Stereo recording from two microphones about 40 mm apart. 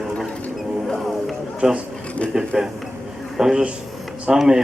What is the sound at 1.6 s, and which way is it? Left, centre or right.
Speech, centre.